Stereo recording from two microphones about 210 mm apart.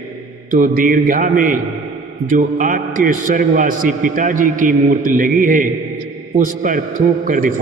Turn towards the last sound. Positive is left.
turn(degrees=-40)  # may be behind; listen again after turning